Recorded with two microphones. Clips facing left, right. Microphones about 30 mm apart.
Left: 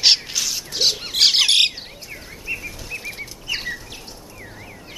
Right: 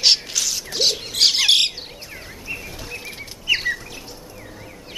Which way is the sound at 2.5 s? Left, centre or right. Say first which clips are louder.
Left 1 dB; centre.